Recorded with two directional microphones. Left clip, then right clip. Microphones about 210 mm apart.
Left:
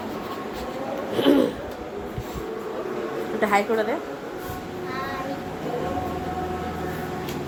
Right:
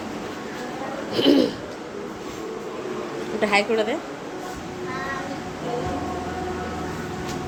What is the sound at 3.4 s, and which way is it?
Speech, 5° right (ahead or behind).